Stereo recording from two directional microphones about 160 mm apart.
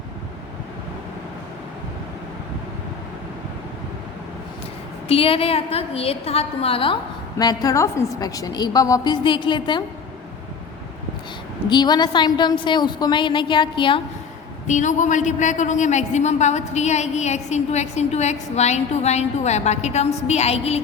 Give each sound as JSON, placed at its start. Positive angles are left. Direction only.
{"t": 5.0, "sound": "a woman's voice", "side_deg": 35}
{"t": 11.7, "sound": "a woman's voice", "side_deg": 25}
{"t": 14.7, "sound": "a woman's voice", "side_deg": 50}